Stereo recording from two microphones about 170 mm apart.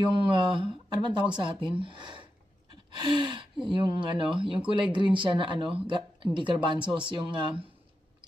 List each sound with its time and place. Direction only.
0.2 s speech: 30° right (ahead or behind)